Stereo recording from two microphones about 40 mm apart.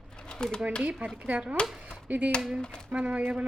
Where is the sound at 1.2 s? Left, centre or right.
Right.